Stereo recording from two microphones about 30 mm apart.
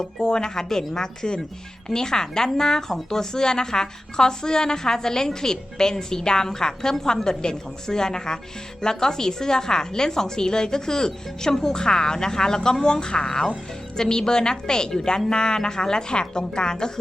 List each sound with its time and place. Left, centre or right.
0.0 s a woman's voice: left